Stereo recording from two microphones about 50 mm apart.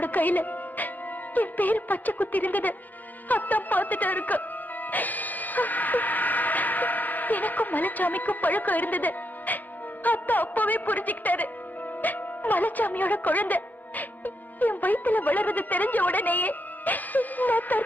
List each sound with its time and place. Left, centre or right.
0.0 s music: left
1.3 s a woman's voice: left
4.9 s music: left
10.0 s a woman's voice: left